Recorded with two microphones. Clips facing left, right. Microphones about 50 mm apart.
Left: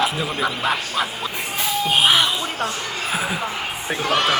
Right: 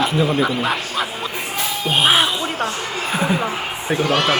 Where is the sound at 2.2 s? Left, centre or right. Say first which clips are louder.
Right 2 dB; centre.